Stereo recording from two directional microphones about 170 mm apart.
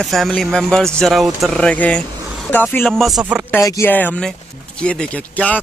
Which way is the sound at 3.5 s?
15° left (ahead or behind).